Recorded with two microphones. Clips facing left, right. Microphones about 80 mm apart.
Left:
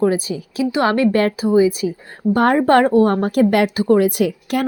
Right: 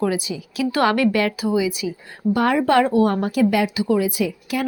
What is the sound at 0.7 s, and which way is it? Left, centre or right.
A woman's voice, left.